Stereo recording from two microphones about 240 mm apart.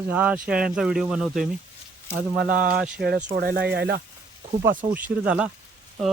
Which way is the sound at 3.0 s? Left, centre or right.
Right.